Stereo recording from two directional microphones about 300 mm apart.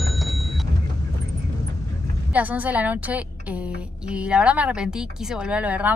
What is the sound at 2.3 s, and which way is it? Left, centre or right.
A woman's voice, centre.